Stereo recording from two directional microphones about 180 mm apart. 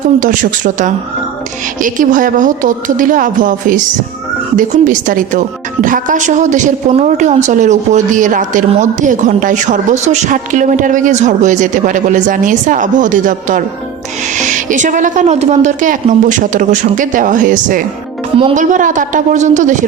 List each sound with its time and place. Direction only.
0.2 s a woman's voice: 45° right (ahead or behind)